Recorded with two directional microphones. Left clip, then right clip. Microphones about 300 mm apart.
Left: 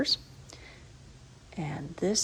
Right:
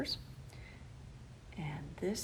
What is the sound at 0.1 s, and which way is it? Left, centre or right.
Speech, left.